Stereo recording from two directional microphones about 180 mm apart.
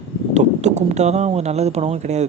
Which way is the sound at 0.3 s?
40° right (ahead or behind).